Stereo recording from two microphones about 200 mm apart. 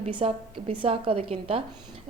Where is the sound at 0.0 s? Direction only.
25° right (ahead or behind).